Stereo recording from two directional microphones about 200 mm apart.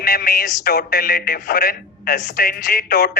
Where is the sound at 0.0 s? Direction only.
50° left (ahead or behind).